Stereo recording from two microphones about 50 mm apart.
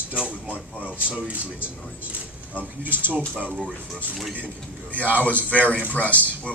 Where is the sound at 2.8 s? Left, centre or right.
Right.